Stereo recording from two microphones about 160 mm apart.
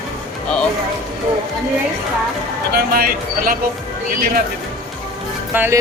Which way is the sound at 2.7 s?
65° right (ahead or behind).